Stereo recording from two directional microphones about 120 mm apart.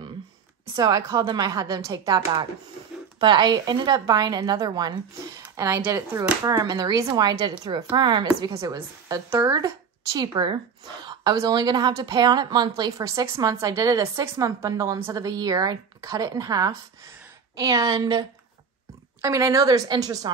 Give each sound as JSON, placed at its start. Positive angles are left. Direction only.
{"t": 0.7, "sound": "a woman's voice", "side_deg": -30}
{"t": 3.2, "sound": "a woman's voice", "side_deg": -40}
{"t": 5.4, "sound": "a woman's voice", "side_deg": -20}
{"t": 19.2, "sound": "a woman's voice", "side_deg": -25}